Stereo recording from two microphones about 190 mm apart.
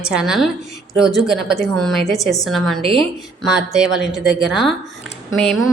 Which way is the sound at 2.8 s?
25° right (ahead or behind).